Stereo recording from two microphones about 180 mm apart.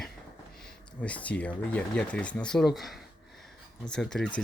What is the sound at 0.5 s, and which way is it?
Speech, 5° left (ahead or behind).